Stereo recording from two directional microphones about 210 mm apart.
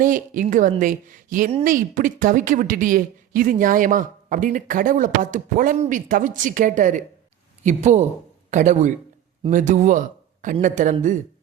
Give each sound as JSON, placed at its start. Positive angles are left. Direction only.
{"t": 0.0, "sound": "a woman's voice", "side_deg": -40}